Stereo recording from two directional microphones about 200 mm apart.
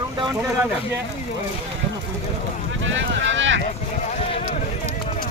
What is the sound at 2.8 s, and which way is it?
Speech, 70° right (ahead or behind).